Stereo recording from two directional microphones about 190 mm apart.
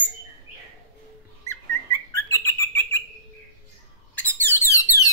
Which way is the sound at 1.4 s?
15° left (ahead or behind).